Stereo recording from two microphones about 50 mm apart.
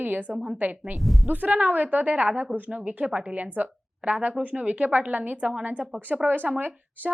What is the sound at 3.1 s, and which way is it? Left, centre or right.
A woman's voice, right.